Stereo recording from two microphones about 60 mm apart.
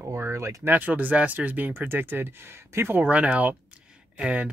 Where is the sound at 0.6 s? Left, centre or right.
Right.